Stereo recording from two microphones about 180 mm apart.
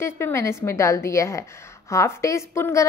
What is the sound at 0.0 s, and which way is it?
A woman's voice, 15° left (ahead or behind).